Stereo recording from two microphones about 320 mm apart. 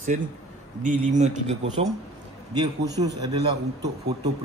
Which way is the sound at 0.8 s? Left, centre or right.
Right.